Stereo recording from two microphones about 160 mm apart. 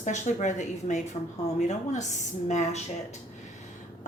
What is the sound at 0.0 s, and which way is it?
A woman's voice, 50° left (ahead or behind).